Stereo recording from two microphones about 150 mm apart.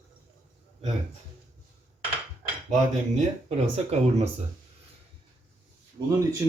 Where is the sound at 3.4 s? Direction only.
45° right (ahead or behind).